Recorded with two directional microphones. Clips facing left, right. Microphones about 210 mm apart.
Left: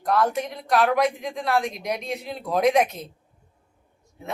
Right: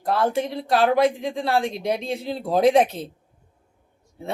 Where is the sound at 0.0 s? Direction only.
30° right (ahead or behind).